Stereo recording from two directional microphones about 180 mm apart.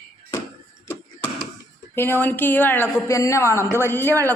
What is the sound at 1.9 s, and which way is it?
Speech, 10° left (ahead or behind).